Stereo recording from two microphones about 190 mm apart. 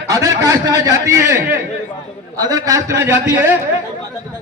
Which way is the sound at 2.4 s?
20° right (ahead or behind).